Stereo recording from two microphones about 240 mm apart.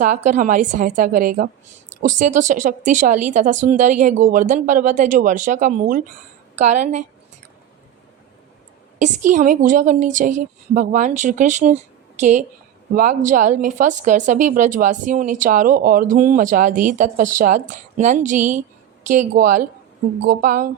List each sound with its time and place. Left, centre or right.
0.0 s a woman's voice: right
9.0 s a woman's voice: right